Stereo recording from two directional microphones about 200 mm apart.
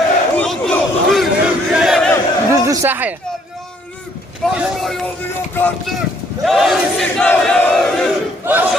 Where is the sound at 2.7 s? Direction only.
10° right (ahead or behind).